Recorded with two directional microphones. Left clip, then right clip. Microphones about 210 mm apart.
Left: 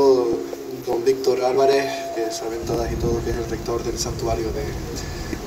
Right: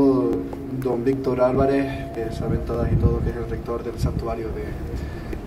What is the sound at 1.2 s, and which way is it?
Speech, 35° left (ahead or behind).